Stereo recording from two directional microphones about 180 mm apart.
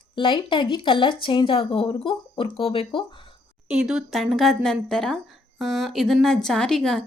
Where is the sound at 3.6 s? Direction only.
5° right (ahead or behind).